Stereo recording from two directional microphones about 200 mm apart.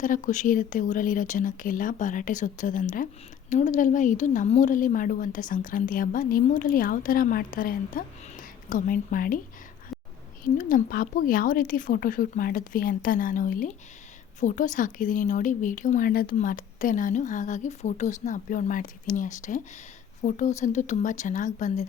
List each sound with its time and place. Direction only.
0.0 s a woman's voice: 40° left (ahead or behind)
10.4 s a woman's voice: 40° left (ahead or behind)